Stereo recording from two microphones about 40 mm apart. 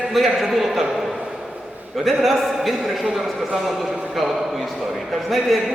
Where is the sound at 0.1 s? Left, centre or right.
Centre.